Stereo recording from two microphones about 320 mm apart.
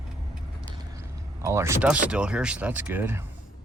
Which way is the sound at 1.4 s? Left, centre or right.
Centre.